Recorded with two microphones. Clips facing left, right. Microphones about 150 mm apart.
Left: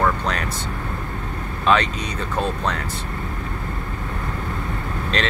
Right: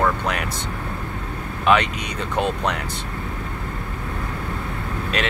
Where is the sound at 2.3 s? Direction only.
15° right (ahead or behind).